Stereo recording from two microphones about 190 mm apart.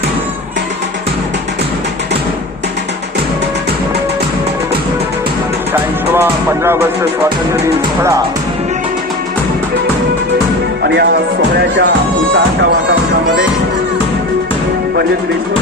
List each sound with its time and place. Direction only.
6.1 s music: 15° right (ahead or behind)
11.8 s music: 65° right (ahead or behind)